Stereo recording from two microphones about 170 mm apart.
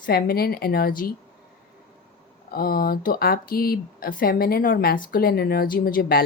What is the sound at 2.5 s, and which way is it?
Speech, 60° left (ahead or behind).